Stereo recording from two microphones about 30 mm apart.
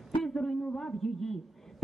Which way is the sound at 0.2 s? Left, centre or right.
Centre.